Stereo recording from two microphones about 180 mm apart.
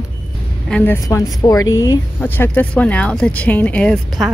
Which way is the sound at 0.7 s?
5° left (ahead or behind).